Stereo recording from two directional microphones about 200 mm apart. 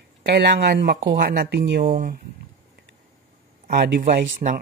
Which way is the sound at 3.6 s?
45° right (ahead or behind).